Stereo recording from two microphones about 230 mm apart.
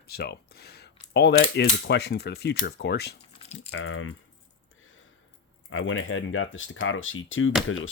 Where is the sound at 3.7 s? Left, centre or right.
Left.